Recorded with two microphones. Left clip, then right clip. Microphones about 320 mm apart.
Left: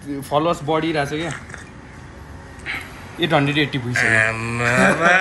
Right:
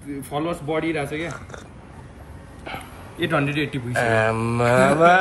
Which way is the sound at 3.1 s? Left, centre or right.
Centre.